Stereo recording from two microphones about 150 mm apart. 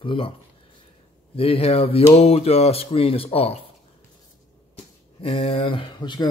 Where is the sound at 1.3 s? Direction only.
40° left (ahead or behind).